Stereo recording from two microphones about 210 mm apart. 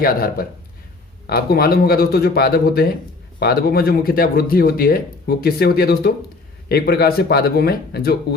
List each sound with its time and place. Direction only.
0.0 s speech: 45° left (ahead or behind)